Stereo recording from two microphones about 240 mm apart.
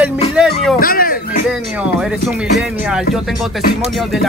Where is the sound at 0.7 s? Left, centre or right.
Left.